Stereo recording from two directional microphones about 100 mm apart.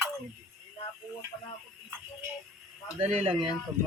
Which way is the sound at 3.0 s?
80° right.